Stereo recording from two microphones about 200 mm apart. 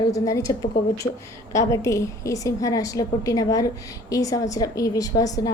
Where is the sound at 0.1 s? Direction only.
15° left (ahead or behind).